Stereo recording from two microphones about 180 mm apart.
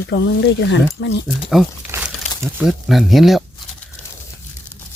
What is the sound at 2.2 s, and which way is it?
Crumpling, 40° left (ahead or behind).